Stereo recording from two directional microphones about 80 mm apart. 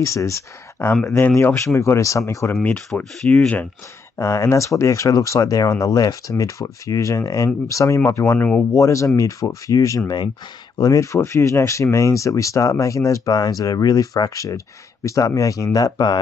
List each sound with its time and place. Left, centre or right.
0.0 s speech: left
1.3 s speech: left
2.9 s speech: centre
3.3 s speech: centre
4.2 s speech: left